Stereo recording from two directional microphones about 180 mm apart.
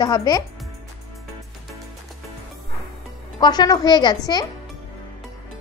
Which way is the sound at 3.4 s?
25° left (ahead or behind).